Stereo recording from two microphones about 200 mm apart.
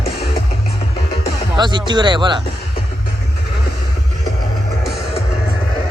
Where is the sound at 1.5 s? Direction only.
20° right (ahead or behind).